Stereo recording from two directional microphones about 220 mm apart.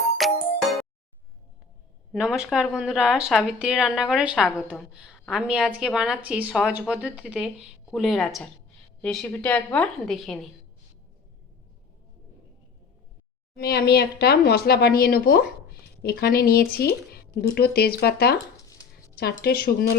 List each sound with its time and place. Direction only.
0.2 s music: centre (ahead or behind)
2.1 s speech: 5° right (ahead or behind)
13.6 s speech: 45° left (ahead or behind)
18.5 s dog: 15° left (ahead or behind)
19.1 s speech: 45° left (ahead or behind)